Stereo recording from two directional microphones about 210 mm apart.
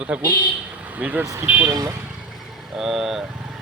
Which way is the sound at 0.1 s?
5° right (ahead or behind).